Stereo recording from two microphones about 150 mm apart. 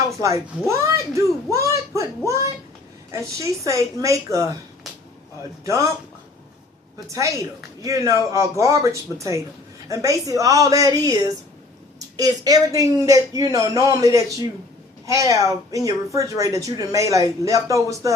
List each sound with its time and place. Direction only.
0.7 s a child's voice: 20° right (ahead or behind)
7.1 s speech: 20° right (ahead or behind)